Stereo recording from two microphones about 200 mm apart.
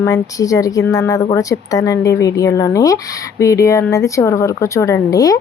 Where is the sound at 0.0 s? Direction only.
15° left (ahead or behind).